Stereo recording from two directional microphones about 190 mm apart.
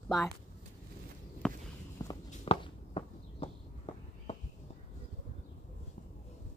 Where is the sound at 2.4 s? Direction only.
30° left (ahead or behind).